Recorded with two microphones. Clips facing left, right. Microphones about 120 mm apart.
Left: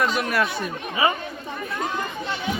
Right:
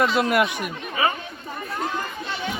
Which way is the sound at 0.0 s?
25° right (ahead or behind).